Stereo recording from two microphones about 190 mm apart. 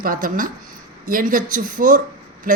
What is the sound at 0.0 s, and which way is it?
A woman's voice, 45° right (ahead or behind).